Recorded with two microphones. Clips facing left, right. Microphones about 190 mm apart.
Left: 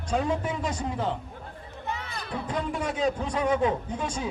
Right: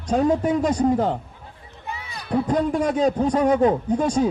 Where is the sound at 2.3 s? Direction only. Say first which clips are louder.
Right 10 dB; 40° right (ahead or behind).